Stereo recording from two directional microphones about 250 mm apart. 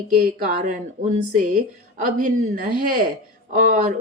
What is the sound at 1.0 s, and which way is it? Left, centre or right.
A woman's voice, right.